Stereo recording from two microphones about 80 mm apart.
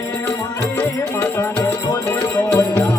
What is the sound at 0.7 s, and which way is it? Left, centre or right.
Music, left.